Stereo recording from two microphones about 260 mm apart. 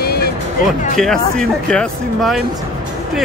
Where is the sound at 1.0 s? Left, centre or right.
Centre.